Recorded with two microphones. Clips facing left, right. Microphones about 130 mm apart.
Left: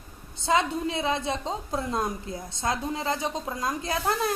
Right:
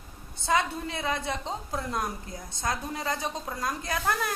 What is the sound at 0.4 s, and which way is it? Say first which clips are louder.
A woman's voice: left 3 dB; 20° left (ahead or behind).